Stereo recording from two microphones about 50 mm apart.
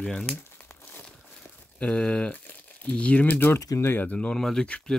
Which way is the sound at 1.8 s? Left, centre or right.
Left.